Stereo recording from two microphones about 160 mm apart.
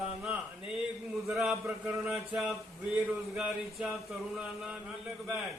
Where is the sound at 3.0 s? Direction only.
5° right (ahead or behind).